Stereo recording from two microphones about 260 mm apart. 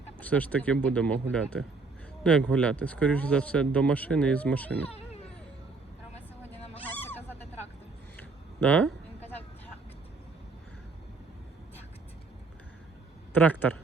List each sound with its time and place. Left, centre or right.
0.2 s speech: centre
4.9 s music: left
6.5 s a sound: centre
8.6 s speech: centre
13.3 s speech: centre